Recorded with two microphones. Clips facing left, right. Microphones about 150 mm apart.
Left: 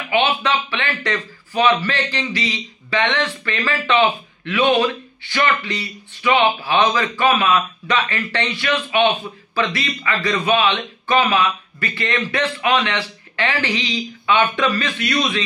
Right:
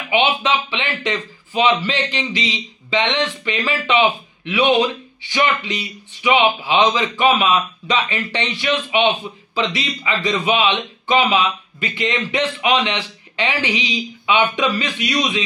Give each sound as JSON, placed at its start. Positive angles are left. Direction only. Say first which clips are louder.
{"t": 0.1, "sound": "a man's voice", "louder": "right 1 dB", "side_deg": -20}